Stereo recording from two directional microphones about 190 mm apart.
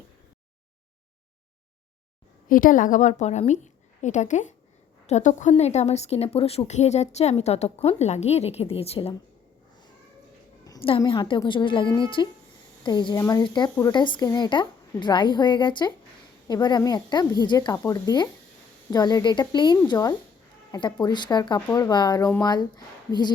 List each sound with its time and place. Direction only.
2.5 s a woman's voice: 45° left (ahead or behind)
10.7 s a woman's voice: 30° left (ahead or behind)